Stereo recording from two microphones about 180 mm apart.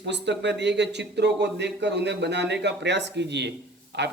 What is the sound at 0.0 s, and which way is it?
Speech, 75° right (ahead or behind).